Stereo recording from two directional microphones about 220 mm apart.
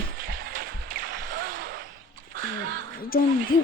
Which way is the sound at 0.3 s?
40° right (ahead or behind).